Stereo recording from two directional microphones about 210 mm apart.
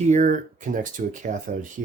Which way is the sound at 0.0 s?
35° right (ahead or behind).